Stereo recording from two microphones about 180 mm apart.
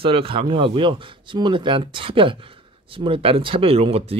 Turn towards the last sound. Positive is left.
turn(degrees=-35)  # may be behind; listen again after turning